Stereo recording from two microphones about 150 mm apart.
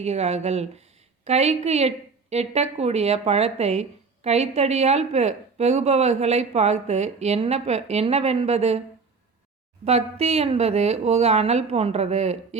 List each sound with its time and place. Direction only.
0.0 s speech: 45° right (ahead or behind)
9.8 s speech: 45° right (ahead or behind)